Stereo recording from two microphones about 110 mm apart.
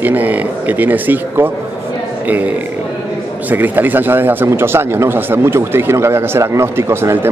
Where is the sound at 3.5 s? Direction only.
15° right (ahead or behind).